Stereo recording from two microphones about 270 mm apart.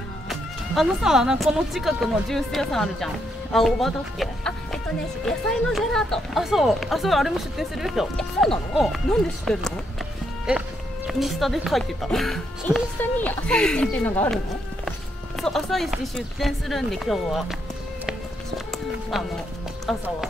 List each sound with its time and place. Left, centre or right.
0.3 s speech: centre
11.1 s speech: centre
15.4 s speech: centre
18.7 s speech: centre